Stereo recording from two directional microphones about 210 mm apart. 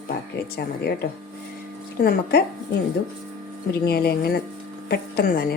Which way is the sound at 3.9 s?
50° left (ahead or behind).